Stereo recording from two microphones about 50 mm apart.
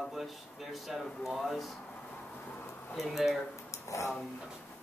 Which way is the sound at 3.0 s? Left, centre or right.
Centre.